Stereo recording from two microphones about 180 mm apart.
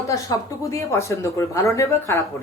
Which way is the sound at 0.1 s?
15° left (ahead or behind).